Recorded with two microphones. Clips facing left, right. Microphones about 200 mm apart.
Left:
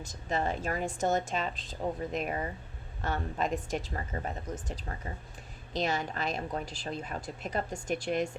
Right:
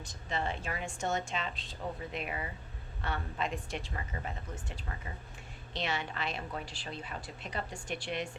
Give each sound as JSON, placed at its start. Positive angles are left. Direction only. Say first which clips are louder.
{"t": 0.3, "sound": "a woman's voice", "louder": "left 5 dB", "side_deg": 40}